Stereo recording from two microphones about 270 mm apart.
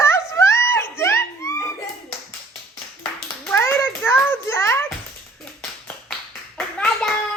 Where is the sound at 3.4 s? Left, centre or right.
Centre.